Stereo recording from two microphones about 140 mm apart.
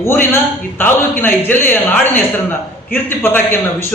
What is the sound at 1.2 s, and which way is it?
A man's voice, 15° left (ahead or behind).